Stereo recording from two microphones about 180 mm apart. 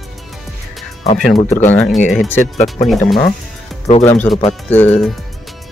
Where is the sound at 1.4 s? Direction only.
40° left (ahead or behind).